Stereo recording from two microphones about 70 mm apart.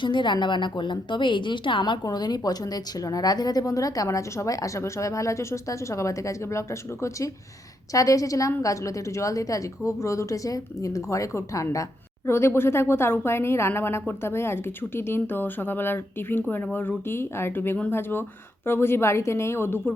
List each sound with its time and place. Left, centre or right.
0.1 s a woman's voice: left
12.3 s speech: left